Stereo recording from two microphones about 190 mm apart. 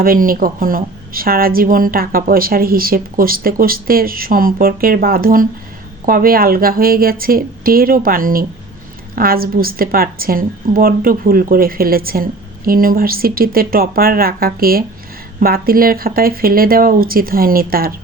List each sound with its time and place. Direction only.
0.0 s a woman's voice: 50° right (ahead or behind)